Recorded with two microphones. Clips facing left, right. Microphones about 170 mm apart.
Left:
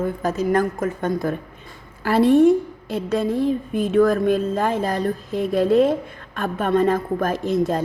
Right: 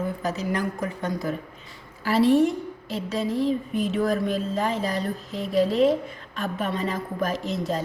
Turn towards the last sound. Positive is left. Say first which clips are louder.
# left 6 dB
turn(degrees=50)  # may be behind; listen again after turning